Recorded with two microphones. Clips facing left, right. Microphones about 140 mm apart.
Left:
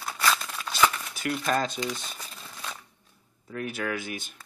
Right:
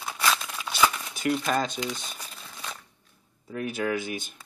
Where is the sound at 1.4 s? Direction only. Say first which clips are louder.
Even; 5° right (ahead or behind).